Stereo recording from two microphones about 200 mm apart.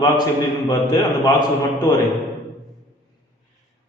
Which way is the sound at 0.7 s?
20° left (ahead or behind).